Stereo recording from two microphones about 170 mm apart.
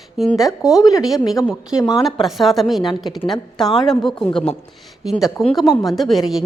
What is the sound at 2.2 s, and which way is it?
Speech, centre (ahead or behind).